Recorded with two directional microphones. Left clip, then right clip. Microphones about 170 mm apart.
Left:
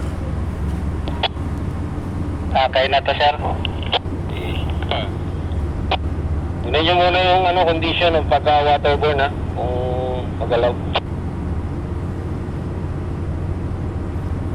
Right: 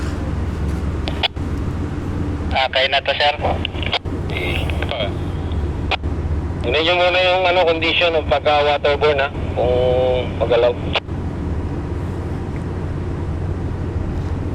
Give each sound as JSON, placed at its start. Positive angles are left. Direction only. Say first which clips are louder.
{"t": 2.5, "sound": "vehicle", "louder": "left 1 dB", "side_deg": -20}
{"t": 6.7, "sound": "a man's voice", "louder": "even", "side_deg": -25}